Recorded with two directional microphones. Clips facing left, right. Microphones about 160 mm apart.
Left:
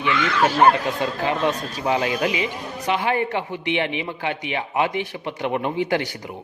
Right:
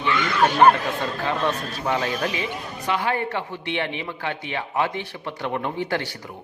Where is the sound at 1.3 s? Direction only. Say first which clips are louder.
Left 2 dB; 15° left (ahead or behind).